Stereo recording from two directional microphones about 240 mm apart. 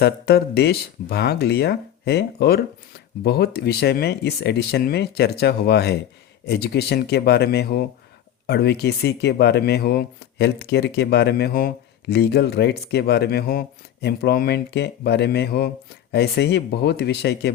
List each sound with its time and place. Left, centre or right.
0.0 s speech: left